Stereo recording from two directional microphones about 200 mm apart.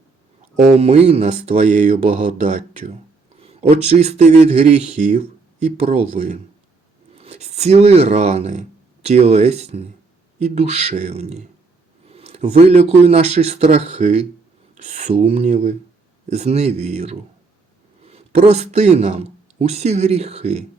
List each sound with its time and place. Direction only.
0.5 s a man's voice: 30° right (ahead or behind)